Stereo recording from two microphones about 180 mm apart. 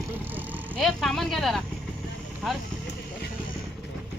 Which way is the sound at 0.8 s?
Centre (ahead or behind).